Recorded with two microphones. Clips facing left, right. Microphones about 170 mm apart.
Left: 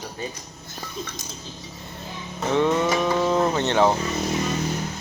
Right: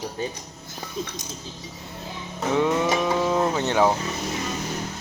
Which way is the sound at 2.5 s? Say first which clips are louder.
Left 1 dB; 5° right (ahead or behind).